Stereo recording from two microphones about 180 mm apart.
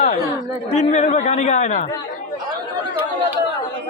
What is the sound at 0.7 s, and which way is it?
Speech, 35° left (ahead or behind).